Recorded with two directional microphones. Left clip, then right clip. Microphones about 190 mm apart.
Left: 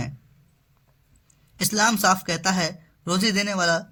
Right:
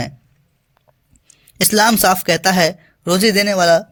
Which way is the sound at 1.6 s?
40° right (ahead or behind).